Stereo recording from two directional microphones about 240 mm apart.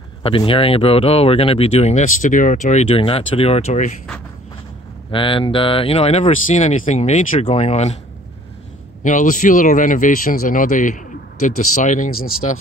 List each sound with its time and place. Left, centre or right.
0.2 s speech: left
5.1 s speech: left
9.0 s speech: left
12.2 s speech: left